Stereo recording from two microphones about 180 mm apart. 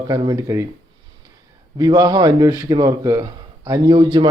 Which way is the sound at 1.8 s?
20° right (ahead or behind).